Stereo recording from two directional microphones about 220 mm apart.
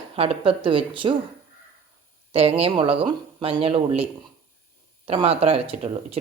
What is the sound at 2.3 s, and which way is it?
Speech, 25° right (ahead or behind).